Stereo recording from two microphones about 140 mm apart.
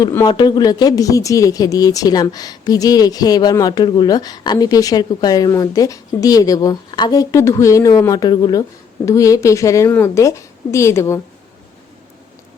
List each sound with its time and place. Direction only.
0.3 s speech: 30° left (ahead or behind)